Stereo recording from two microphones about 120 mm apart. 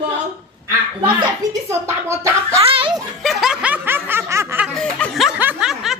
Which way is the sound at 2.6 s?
50° right (ahead or behind).